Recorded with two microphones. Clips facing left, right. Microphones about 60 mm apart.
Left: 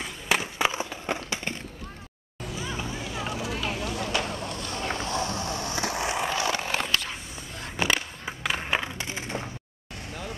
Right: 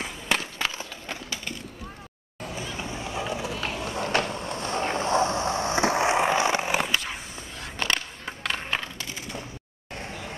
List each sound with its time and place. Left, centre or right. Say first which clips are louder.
0.3 s a sound: left 3 dB; centre
3.6 s vehicle: right 1 dB; right; by 7.2 s centre
7.7 s skateboard: left 2 dB; centre; by 9.4 s left